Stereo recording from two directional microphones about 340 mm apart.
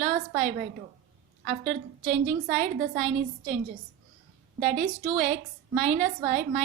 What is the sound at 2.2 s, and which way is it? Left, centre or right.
Speech, right.